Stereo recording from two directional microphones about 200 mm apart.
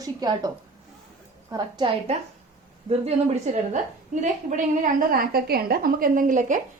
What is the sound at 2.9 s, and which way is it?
A woman's voice, 35° right (ahead or behind).